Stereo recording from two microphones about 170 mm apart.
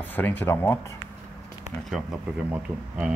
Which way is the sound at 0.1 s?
10° left (ahead or behind).